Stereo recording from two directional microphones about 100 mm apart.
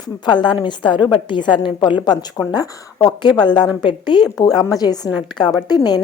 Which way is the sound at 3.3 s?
50° left (ahead or behind).